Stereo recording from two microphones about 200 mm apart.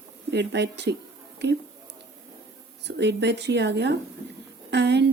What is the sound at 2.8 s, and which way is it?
Speech, 60° right (ahead or behind).